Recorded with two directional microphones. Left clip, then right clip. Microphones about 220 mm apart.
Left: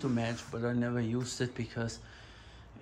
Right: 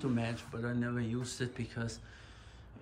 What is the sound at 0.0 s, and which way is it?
Speech, centre (ahead or behind).